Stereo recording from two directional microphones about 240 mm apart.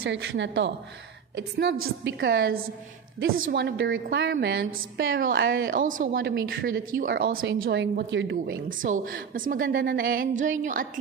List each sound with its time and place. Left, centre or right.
0.0 s a woman's voice: right
5.7 s a woman's voice: right
8.6 s a woman's voice: right